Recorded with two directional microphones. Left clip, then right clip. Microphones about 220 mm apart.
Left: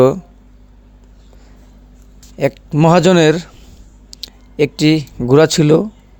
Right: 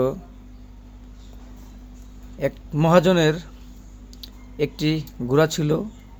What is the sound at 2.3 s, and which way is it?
A man's voice, 45° left (ahead or behind).